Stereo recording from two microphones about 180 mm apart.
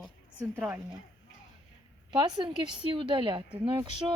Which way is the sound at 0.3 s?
10° right (ahead or behind).